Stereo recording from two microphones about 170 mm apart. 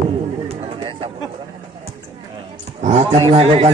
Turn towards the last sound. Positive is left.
turn(degrees=-40)  # may be behind; listen again after turning